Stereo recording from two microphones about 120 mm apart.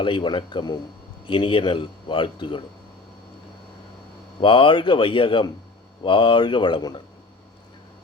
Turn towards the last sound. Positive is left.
turn(degrees=40)  # may be behind; listen again after turning